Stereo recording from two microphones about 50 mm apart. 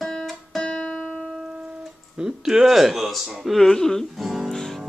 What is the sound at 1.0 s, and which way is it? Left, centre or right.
Music, centre.